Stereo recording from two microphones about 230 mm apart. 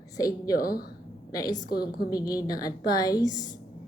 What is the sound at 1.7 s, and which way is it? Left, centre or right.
Speech, left.